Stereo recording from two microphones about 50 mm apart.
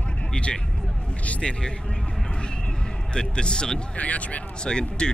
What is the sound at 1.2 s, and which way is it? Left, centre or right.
Speech, left.